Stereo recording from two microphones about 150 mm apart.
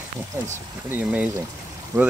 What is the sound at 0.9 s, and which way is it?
Speech, 10° right (ahead or behind).